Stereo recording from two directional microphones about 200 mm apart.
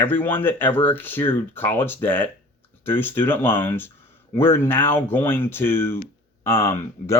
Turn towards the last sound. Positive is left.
turn(degrees=15)  # may be behind; listen again after turning